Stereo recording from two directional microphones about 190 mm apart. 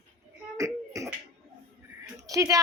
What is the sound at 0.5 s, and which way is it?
Beatboxing, 15° right (ahead or behind).